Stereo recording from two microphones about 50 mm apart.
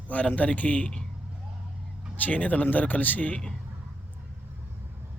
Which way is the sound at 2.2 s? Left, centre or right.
Left.